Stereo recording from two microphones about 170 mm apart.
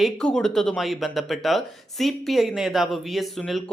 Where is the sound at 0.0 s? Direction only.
5° left (ahead or behind).